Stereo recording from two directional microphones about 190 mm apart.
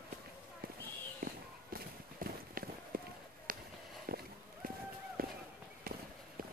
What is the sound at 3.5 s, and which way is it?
Fireworks, 45° right (ahead or behind).